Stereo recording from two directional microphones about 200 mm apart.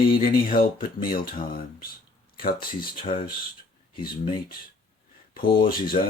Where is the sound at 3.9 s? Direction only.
25° left (ahead or behind).